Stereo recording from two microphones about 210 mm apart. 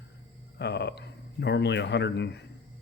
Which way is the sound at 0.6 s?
55° left (ahead or behind).